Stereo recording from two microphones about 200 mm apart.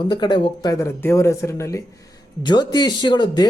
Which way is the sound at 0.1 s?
20° left (ahead or behind).